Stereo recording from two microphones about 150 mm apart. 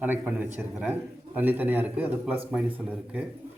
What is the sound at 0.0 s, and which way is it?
Speech, 10° right (ahead or behind).